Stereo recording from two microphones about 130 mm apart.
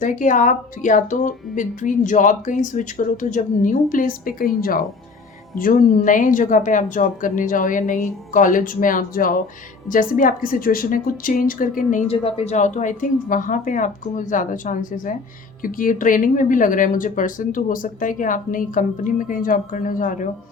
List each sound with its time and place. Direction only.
0.0 s speech: 80° left
12.0 s speech: 50° left (ahead or behind); by 20.3 s 85° left